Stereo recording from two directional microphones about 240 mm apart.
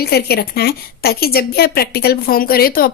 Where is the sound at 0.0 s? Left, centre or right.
Left.